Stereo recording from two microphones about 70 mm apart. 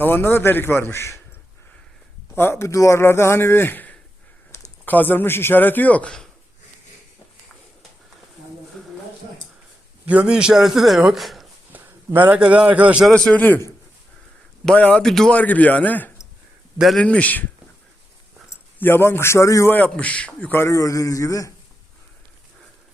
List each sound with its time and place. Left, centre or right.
0.0 s speech: left
2.3 s speech: left
4.5 s a sound: left
4.9 s a man's voice: left
10.1 s a man's voice: centre
11.7 s a man's voice: right
13.1 s a man's voice: centre
13.3 s a man's voice: left
14.8 s a man's voice: centre
15.0 s a man's voice: centre
15.3 s a man's voice: left
18.8 s speech: left
19.6 s a man's voice: left
20.6 s a man's voice: left